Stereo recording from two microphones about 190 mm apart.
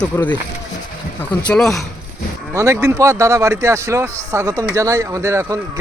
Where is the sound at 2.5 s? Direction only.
15° right (ahead or behind).